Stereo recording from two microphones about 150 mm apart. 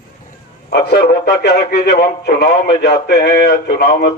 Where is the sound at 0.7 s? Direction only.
90° left.